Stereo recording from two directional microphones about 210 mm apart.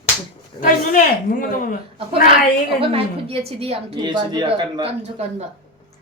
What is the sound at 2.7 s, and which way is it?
A woman's voice, 25° right (ahead or behind).